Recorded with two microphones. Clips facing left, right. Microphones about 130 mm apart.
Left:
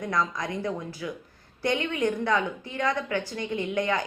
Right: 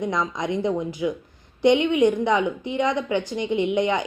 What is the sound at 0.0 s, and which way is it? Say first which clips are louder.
Speech: right 3 dB; 20° right (ahead or behind).